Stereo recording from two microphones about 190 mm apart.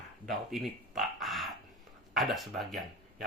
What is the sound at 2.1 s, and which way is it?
Speech, centre (ahead or behind).